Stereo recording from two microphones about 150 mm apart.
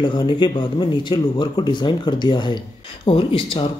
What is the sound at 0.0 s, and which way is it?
Speech, 30° left (ahead or behind).